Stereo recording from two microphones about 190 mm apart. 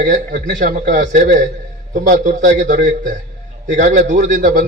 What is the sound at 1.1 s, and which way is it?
Speech, 40° right (ahead or behind).